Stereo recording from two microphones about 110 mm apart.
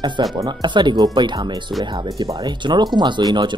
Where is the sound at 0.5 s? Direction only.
45° right (ahead or behind).